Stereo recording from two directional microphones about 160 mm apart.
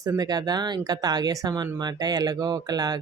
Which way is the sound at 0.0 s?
20° right (ahead or behind).